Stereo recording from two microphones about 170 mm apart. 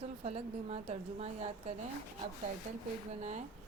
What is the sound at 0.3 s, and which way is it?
A woman's voice, 40° right (ahead or behind).